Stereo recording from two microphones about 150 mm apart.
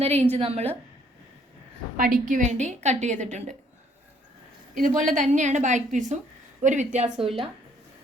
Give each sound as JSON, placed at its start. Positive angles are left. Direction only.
{"t": 0.0, "sound": "a woman's voice", "side_deg": -45}
{"t": 2.0, "sound": "a woman's voice", "side_deg": -65}
{"t": 4.7, "sound": "a woman's voice", "side_deg": -65}